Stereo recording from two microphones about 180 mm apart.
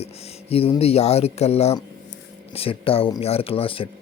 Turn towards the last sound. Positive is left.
turn(degrees=30)  # may be behind; listen again after turning